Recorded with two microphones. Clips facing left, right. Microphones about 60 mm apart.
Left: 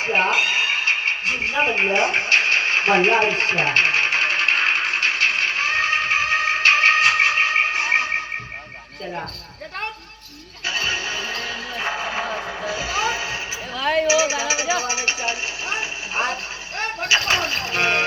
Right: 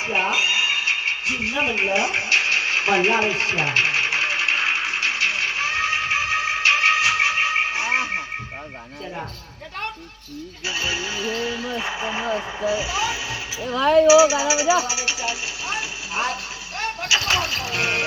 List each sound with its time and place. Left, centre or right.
0.0 s cat: left
10.7 s music: left
14.1 s vehicle: left